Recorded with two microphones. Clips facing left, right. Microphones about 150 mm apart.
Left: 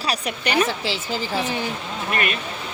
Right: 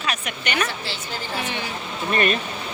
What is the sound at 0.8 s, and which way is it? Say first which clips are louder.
Speech: left 5 dB; 90° left.